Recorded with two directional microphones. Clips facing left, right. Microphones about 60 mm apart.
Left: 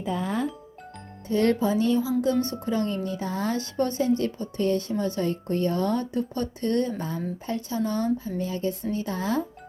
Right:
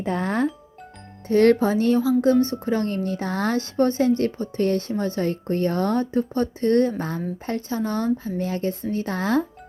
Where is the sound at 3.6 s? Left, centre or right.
Right.